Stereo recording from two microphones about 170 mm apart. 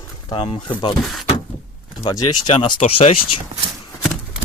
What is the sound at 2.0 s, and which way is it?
Speech, 25° left (ahead or behind).